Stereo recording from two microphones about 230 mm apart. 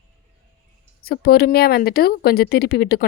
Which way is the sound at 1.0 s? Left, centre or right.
Left.